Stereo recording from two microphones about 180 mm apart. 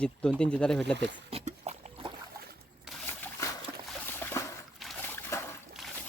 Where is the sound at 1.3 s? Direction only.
40° right (ahead or behind).